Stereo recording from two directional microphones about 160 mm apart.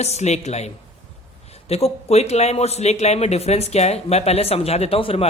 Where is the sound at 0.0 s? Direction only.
45° left (ahead or behind).